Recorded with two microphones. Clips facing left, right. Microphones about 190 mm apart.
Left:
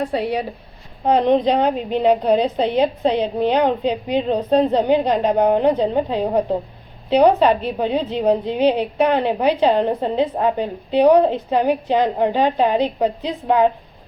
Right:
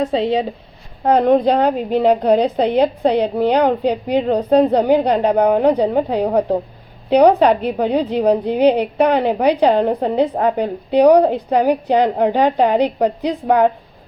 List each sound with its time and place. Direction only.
0.0 s speech: 20° right (ahead or behind)
1.0 s a woman's voice: 10° right (ahead or behind)